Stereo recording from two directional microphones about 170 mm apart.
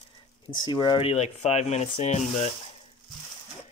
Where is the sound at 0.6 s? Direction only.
25° left (ahead or behind); by 2.5 s 45° left (ahead or behind).